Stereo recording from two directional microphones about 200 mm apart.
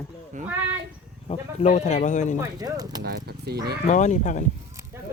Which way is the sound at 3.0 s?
50° right (ahead or behind).